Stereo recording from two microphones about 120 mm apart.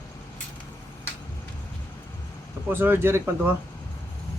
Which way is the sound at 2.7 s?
20° right (ahead or behind).